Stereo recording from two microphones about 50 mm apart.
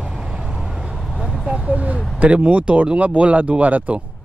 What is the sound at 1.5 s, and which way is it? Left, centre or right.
Speech, right.